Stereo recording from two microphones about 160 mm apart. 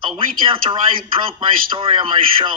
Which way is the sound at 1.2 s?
30° right (ahead or behind).